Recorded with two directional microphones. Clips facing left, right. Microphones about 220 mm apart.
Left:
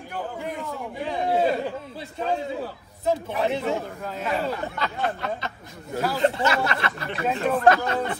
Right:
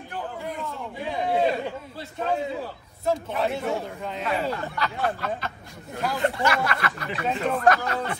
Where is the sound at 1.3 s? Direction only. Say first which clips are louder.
Left 1 dB; centre (ahead or behind).